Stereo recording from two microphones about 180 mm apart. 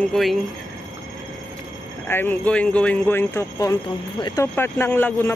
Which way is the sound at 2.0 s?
10° left (ahead or behind).